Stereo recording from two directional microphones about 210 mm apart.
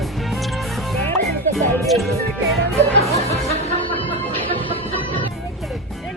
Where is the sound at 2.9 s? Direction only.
30° right (ahead or behind).